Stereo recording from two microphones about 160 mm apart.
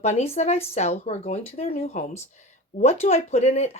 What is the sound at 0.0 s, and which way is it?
Speech, 40° left (ahead or behind).